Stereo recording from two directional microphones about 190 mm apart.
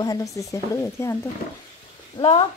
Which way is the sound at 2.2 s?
30° left (ahead or behind).